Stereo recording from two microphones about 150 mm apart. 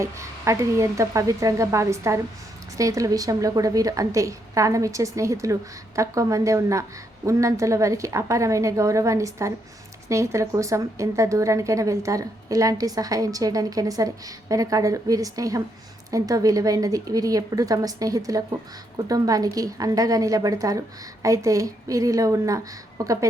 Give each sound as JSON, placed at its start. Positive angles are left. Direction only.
{"t": 0.0, "sound": "a woman's voice", "side_deg": -20}